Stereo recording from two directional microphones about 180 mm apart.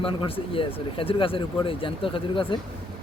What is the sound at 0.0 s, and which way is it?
Speech, 30° left (ahead or behind).